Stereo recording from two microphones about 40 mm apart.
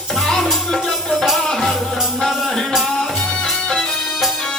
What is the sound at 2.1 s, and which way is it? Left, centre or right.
Music, centre.